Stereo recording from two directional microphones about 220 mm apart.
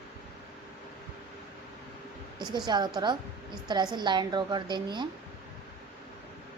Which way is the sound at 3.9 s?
20° right (ahead or behind).